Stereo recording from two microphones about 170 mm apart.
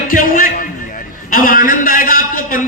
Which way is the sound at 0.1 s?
55° left (ahead or behind).